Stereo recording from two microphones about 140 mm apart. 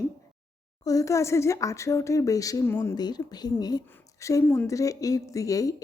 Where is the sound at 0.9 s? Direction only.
25° left (ahead or behind).